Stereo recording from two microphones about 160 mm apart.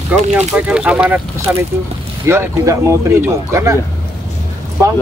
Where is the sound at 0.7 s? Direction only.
5° right (ahead or behind).